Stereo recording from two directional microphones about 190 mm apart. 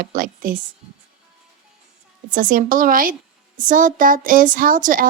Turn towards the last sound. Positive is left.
turn(degrees=-45)  # may be behind; listen again after turning